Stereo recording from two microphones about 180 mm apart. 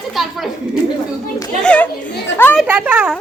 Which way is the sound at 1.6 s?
10° left (ahead or behind).